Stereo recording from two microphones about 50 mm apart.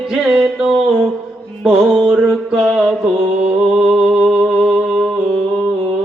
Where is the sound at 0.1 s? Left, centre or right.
Centre.